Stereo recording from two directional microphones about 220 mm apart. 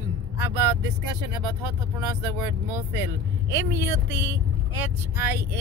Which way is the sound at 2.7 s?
15° right (ahead or behind).